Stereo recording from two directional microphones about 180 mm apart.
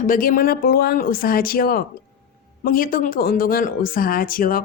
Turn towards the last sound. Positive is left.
turn(degrees=50)  # may be behind; listen again after turning